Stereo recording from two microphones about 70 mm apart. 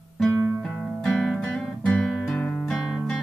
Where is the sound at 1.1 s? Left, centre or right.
Centre.